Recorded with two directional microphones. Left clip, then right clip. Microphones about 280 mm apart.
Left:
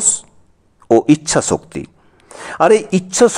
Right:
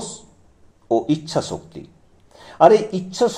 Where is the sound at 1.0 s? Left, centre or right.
Left.